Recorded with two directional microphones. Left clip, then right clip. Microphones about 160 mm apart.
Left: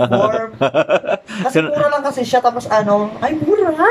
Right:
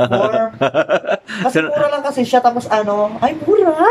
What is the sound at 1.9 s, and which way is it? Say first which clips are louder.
A woman's voice: even; 5° right (ahead or behind).